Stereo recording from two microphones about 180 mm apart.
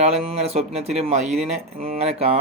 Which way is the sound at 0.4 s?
35° right (ahead or behind).